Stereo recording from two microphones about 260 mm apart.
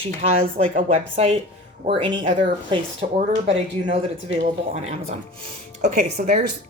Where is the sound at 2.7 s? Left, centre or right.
Right.